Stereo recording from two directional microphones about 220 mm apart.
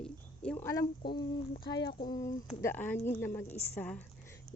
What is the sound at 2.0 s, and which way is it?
A woman's voice, 15° left (ahead or behind).